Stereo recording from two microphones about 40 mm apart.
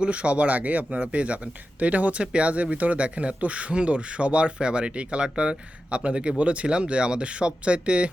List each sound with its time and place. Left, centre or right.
0.0 s speech: right